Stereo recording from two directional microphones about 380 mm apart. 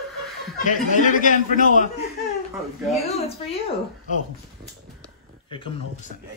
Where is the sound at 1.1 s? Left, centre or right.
Left.